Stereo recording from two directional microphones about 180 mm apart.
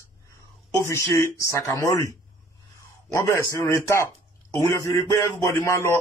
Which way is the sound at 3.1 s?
15° left (ahead or behind).